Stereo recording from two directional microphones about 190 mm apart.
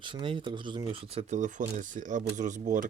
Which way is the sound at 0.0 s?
25° right (ahead or behind).